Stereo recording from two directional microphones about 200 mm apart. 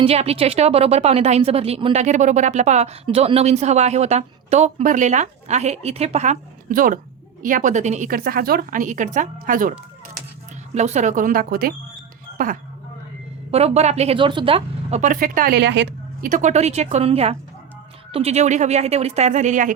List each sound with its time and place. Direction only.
0.0 s a woman's voice: 30° right (ahead or behind)
10.8 s a woman's voice: 35° right (ahead or behind)
13.5 s a woman's voice: 30° right (ahead or behind); by 16.3 s 60° right (ahead or behind)
16.3 s a woman's voice: 35° right (ahead or behind)